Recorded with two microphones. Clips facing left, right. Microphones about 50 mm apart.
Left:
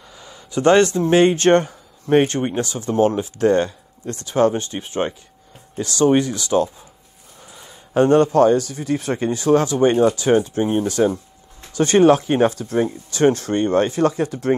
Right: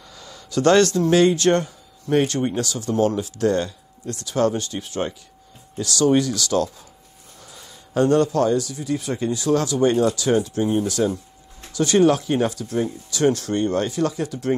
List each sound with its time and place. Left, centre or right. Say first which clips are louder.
0.1 s speech: even; centre; by 14.6 s left